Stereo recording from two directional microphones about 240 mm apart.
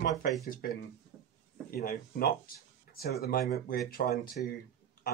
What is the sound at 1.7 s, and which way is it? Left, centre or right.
Speech, left.